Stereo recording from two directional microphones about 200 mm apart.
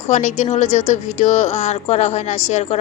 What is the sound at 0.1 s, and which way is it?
A woman's voice, 35° left (ahead or behind).